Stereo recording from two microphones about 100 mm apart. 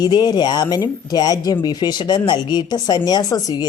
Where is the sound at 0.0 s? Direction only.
45° left (ahead or behind).